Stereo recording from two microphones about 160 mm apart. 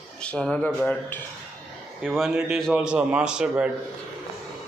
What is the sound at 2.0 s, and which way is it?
A man's voice, centre (ahead or behind).